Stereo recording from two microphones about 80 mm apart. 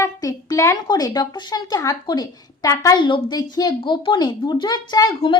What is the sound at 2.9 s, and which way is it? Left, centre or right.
Speech, left.